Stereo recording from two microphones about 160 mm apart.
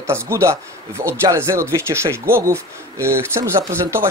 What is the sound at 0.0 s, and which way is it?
Speech, 15° right (ahead or behind).